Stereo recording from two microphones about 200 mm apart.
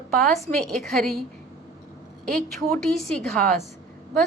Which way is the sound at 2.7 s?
5° left (ahead or behind).